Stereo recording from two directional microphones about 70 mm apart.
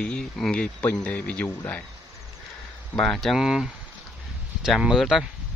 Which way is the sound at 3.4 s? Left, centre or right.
Centre.